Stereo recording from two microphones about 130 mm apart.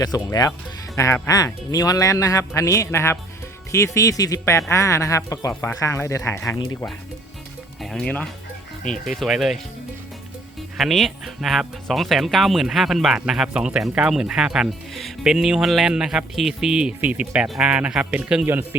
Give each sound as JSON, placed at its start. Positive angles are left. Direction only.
{"t": 0.0, "sound": "speech", "side_deg": 30}
{"t": 7.8, "sound": "speech", "side_deg": 5}
{"t": 10.8, "sound": "speech", "side_deg": 0}